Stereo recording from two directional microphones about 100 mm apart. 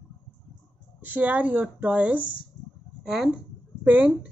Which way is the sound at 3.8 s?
15° right (ahead or behind).